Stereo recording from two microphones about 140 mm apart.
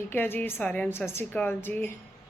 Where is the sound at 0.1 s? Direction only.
15° left (ahead or behind).